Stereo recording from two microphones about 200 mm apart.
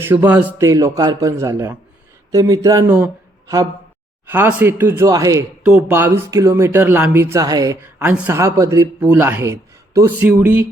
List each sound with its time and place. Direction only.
0.0 s speech: 10° right (ahead or behind)
4.3 s speech: 10° right (ahead or behind)